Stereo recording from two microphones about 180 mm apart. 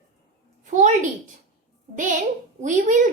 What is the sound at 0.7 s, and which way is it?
Speech, 40° right (ahead or behind).